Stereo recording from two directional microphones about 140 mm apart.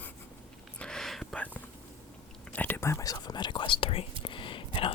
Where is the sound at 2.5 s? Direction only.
15° left (ahead or behind).